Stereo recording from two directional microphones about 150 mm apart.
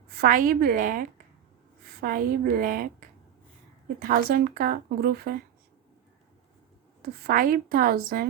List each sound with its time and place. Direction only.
0.1 s a woman's voice: 80° right; by 1.0 s 60° right (ahead or behind)
1.8 s a woman's voice: 80° right
7.0 s a woman's voice: 75° right (ahead or behind)